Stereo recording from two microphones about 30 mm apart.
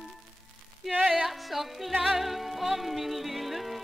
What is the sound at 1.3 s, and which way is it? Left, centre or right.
Music, centre.